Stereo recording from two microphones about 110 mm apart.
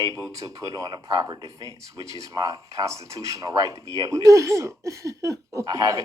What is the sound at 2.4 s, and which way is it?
Speech, 30° right (ahead or behind).